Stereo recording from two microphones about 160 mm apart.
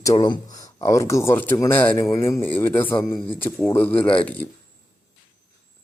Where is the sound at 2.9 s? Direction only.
30° left (ahead or behind).